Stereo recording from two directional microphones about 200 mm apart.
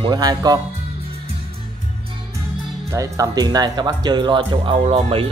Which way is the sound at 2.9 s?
15° right (ahead or behind).